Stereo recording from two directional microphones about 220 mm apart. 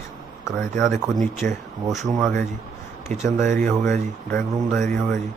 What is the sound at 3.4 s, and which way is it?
Speech, 35° right (ahead or behind).